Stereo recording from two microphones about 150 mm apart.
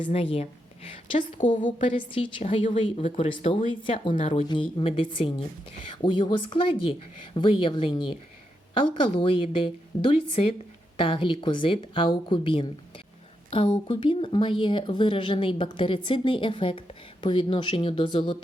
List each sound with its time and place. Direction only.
0.0 s speech: 40° left (ahead or behind)
1.6 s speech: 35° left (ahead or behind)
13.8 s speech: 35° left (ahead or behind)